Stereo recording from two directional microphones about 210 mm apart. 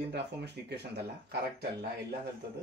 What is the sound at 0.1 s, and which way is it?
Speech, 50° right (ahead or behind).